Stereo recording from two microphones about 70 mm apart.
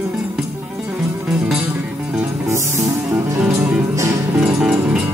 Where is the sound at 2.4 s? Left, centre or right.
Right.